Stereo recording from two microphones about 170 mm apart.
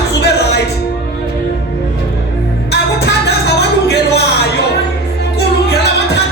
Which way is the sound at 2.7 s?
75° left (ahead or behind).